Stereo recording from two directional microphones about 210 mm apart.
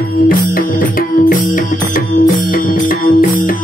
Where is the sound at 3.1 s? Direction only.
40° left (ahead or behind).